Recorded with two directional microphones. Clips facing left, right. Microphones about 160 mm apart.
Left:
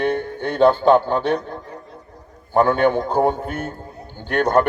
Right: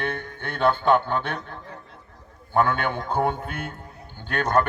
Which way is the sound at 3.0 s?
35° left (ahead or behind).